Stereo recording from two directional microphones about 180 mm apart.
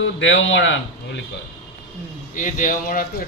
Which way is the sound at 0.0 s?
90° left.